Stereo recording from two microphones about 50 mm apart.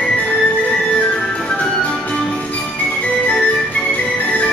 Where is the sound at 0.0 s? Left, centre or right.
Left.